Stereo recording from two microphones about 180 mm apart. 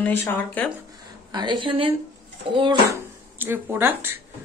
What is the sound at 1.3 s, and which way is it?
A woman's voice, 25° right (ahead or behind).